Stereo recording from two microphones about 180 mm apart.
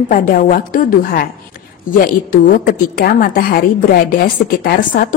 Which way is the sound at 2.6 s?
50° left (ahead or behind).